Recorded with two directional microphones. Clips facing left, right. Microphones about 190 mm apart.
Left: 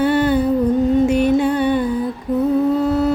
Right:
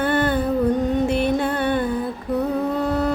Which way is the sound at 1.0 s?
10° left (ahead or behind).